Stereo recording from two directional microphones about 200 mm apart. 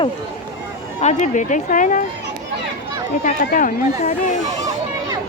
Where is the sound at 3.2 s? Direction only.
40° left (ahead or behind).